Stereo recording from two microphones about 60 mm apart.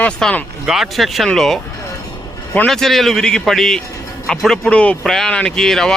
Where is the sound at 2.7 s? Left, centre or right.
Centre.